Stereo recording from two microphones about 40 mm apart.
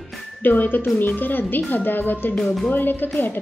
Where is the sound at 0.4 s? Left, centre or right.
Left.